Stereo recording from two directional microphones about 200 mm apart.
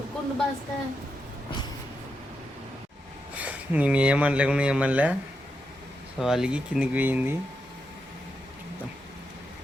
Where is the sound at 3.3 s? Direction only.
5° right (ahead or behind).